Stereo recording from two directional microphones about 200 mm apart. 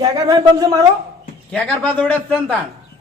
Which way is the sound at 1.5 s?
5° left (ahead or behind).